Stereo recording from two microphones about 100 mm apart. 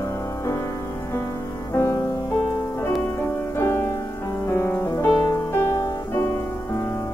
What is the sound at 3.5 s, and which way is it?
Music, 30° left (ahead or behind).